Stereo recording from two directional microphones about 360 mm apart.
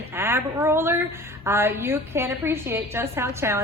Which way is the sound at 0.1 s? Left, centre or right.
Centre.